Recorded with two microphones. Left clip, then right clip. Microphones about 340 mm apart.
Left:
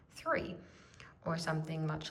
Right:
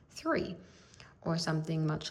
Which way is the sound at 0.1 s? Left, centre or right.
Centre.